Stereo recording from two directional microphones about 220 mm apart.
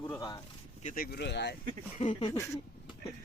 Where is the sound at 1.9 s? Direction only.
30° left (ahead or behind).